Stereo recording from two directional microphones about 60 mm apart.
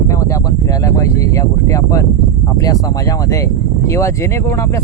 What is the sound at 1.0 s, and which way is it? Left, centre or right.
Speech, left.